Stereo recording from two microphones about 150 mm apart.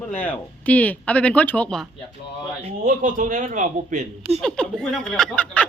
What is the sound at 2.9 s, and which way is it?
A man's voice, 60° right (ahead or behind).